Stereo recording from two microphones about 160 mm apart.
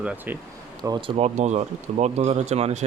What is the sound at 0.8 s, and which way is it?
Speech, 20° right (ahead or behind).